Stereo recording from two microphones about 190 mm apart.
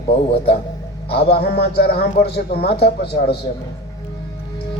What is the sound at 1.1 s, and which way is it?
A man's voice, 60° left (ahead or behind).